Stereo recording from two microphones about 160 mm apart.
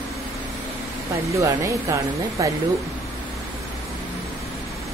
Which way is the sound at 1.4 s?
20° right (ahead or behind).